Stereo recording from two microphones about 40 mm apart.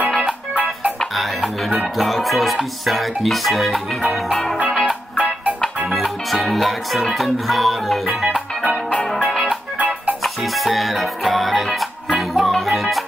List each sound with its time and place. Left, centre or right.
0.2 s music: right
1.1 s music: centre
5.1 s music: right
5.9 s music: centre
10.2 s music: centre